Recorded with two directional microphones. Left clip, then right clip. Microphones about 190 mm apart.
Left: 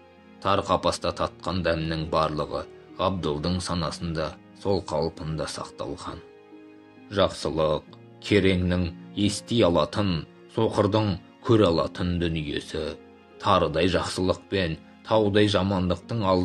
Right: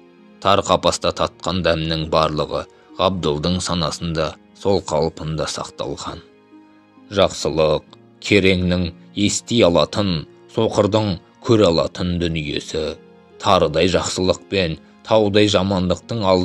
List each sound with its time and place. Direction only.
0.4 s speech: 40° right (ahead or behind)